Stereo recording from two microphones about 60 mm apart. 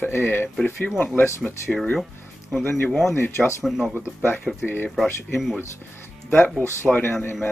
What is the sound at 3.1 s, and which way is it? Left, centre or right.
Speech, left.